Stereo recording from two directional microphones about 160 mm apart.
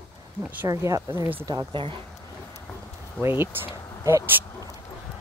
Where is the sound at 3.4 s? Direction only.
15° right (ahead or behind).